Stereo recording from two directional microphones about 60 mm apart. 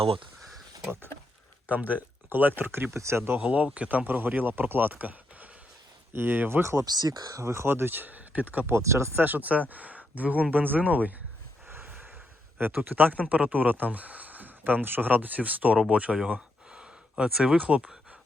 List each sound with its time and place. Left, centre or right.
1.7 s speech: right
2.9 s speech: right
3.3 s speech: right
6.6 s speech: right
6.8 s speech: right
7.4 s speech: right
8.6 s speech: right
9.2 s speech: right
11.7 s a sound: right
12.5 s speech: right
16.3 s a sound: centre
17.4 s speech: centre